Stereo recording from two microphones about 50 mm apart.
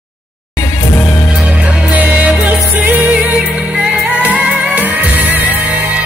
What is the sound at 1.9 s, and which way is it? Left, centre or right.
Music, right.